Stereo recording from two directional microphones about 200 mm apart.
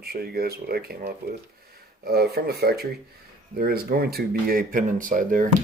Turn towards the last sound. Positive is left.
turn(degrees=-40)  # may be behind; listen again after turning